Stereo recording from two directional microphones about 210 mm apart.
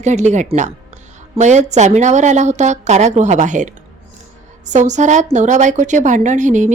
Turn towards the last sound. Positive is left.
turn(degrees=-35)  # may be behind; listen again after turning